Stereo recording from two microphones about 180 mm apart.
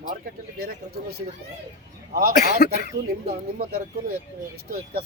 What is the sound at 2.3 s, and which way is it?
Speech, 60° left (ahead or behind).